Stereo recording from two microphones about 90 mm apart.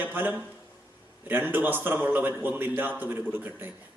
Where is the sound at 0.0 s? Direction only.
20° right (ahead or behind).